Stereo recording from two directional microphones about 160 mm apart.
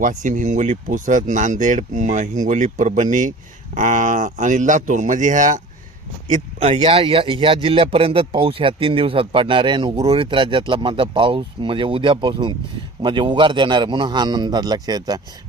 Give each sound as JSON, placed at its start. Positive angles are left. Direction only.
{"t": 0.0, "sound": "a man's voice", "side_deg": -50}